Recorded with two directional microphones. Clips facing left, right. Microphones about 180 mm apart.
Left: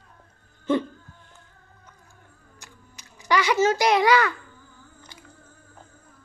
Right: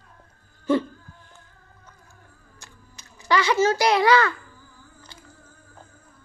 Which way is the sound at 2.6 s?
15° left (ahead or behind).